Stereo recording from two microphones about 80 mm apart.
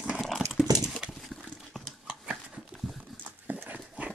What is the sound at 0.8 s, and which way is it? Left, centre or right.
Clip-clop, centre.